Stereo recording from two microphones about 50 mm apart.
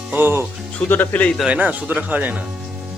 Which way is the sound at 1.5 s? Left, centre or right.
Right.